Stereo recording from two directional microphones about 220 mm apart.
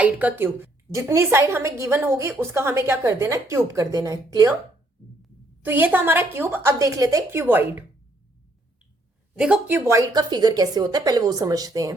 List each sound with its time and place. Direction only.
0.0 s a woman's voice: 5° right (ahead or behind)
5.6 s a woman's voice: 10° right (ahead or behind)
9.4 s a woman's voice: 5° right (ahead or behind)